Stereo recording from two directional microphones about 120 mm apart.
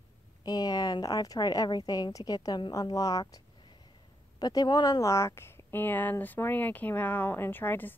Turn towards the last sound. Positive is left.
turn(degrees=15)  # may be behind; listen again after turning